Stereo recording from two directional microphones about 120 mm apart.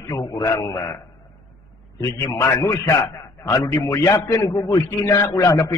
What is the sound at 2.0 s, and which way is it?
A man's voice, 25° left (ahead or behind).